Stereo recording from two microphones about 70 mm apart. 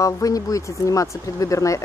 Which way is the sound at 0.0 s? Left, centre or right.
Left.